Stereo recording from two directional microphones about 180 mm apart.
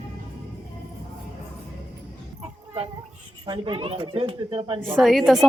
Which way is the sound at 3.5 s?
25° right (ahead or behind).